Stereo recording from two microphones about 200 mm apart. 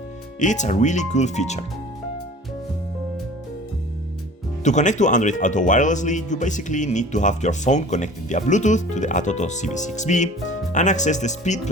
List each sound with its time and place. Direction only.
0.3 s speech: 35° left (ahead or behind)
4.6 s speech: 35° left (ahead or behind)